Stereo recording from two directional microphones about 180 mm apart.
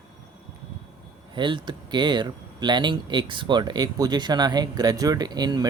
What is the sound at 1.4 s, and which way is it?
Speech, 25° right (ahead or behind).